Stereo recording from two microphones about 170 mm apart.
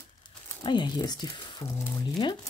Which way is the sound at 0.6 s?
25° left (ahead or behind).